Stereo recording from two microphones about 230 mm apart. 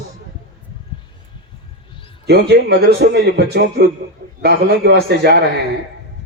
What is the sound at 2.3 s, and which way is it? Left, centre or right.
A man's voice, right.